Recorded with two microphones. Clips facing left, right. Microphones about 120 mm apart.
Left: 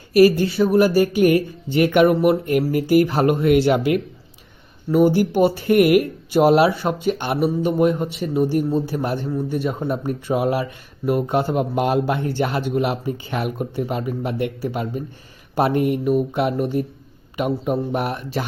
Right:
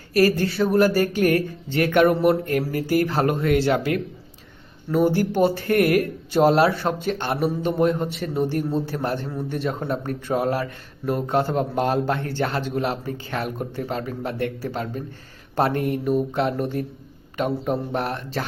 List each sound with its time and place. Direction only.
0.1 s speech: 15° left (ahead or behind)
0.4 s speech: centre (ahead or behind)
2.4 s speech: 15° left (ahead or behind)